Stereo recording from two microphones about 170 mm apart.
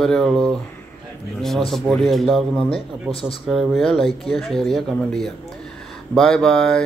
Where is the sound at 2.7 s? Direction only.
35° left (ahead or behind).